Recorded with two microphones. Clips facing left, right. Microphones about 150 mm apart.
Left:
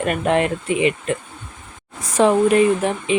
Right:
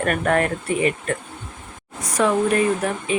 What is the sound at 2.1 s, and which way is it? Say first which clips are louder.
Speech: left 4 dB; 30° left (ahead or behind).